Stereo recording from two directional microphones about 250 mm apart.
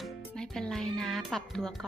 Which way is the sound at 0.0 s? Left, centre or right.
Centre.